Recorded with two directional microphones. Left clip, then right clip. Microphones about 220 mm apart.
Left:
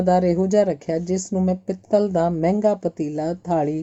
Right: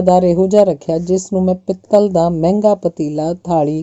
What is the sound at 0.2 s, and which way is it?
Speech, 20° right (ahead or behind).